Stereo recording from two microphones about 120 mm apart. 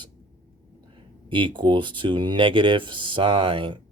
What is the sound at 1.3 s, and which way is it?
Speech, 45° right (ahead or behind).